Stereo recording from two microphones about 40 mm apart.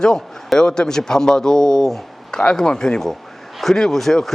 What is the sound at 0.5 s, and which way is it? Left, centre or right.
Speech, centre.